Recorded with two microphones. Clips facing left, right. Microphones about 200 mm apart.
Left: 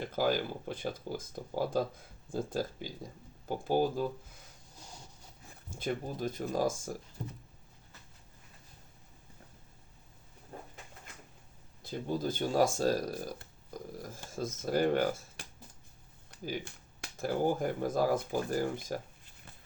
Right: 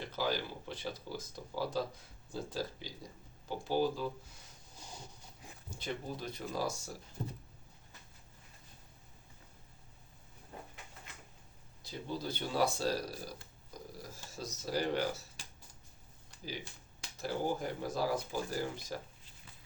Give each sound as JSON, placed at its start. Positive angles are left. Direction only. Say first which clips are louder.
{"t": 0.0, "sound": "speech", "louder": "left 5 dB", "side_deg": 50}
{"t": 5.7, "sound": "speech", "louder": "left 5 dB", "side_deg": 50}
{"t": 10.5, "sound": "a sound", "louder": "left 2 dB", "side_deg": 45}
{"t": 11.8, "sound": "speech", "louder": "left 6 dB", "side_deg": 50}
{"t": 17.0, "sound": "speech", "louder": "left 5 dB", "side_deg": 50}